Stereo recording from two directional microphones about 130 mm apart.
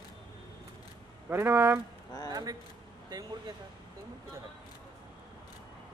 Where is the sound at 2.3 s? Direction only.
30° right (ahead or behind).